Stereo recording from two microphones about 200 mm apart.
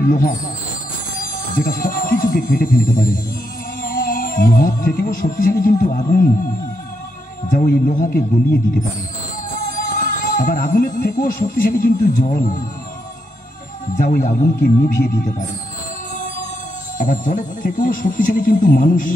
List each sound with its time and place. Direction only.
0.0 s speech: 45° left (ahead or behind)
1.5 s speech: 45° left (ahead or behind)
7.5 s speech: 45° left (ahead or behind)
9.7 s speech: 40° left (ahead or behind)
13.9 s speech: 40° left (ahead or behind)
17.0 s speech: 40° left (ahead or behind)